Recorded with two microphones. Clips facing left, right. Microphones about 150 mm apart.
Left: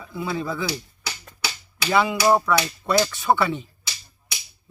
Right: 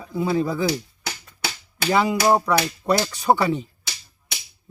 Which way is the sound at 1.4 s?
45° right (ahead or behind).